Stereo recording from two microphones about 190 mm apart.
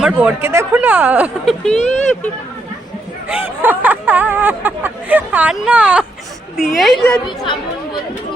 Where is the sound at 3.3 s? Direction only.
10° right (ahead or behind).